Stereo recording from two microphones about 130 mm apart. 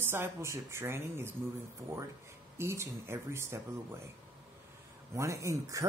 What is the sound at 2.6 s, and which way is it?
A man's voice, 20° right (ahead or behind).